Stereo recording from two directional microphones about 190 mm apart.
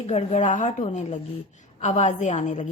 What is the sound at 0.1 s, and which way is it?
A woman's voice, 35° left (ahead or behind).